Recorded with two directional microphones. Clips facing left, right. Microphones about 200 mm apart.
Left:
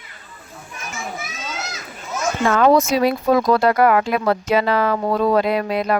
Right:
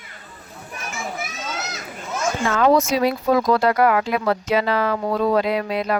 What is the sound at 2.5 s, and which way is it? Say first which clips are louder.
Speech: left 2 dB; 50° left (ahead or behind).